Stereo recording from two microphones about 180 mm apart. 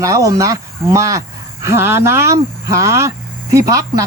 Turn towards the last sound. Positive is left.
turn(degrees=-20)  # may be behind; listen again after turning